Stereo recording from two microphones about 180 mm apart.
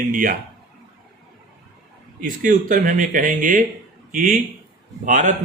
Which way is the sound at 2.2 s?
45° right (ahead or behind).